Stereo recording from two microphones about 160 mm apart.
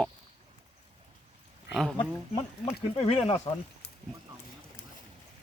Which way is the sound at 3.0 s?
35° left (ahead or behind).